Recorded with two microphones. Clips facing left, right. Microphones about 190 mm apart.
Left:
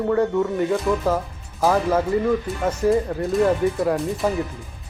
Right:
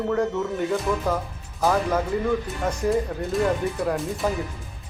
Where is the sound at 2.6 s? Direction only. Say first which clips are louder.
Left 4 dB; centre (ahead or behind).